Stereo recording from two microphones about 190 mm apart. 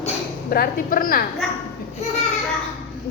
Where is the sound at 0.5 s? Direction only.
50° left (ahead or behind).